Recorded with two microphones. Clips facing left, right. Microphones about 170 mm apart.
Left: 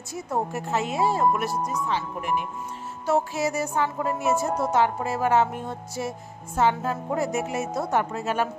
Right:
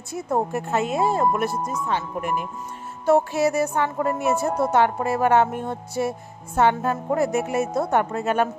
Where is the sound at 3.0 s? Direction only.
60° right (ahead or behind).